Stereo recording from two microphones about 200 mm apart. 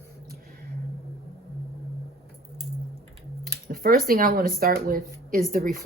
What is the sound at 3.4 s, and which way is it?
Speech, 45° right (ahead or behind).